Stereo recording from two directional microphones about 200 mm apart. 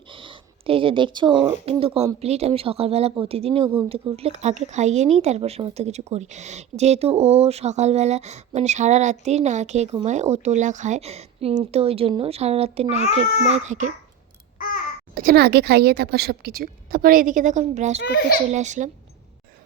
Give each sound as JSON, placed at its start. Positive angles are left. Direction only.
{"t": 0.1, "sound": "a sound", "side_deg": -25}
{"t": 1.6, "sound": "a woman's voice", "side_deg": -30}
{"t": 15.1, "sound": "a woman's voice", "side_deg": -45}
{"t": 18.0, "sound": "a child's voice", "side_deg": 55}
{"t": 18.5, "sound": "a woman's voice", "side_deg": -35}